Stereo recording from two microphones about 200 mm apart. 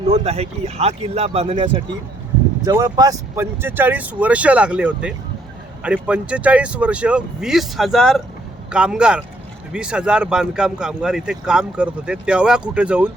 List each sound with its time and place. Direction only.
0.0 s speech: 30° right (ahead or behind)
2.6 s speech: 20° right (ahead or behind)